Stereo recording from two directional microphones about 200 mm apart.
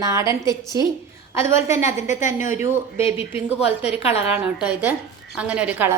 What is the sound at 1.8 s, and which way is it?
Speech, 40° left (ahead or behind).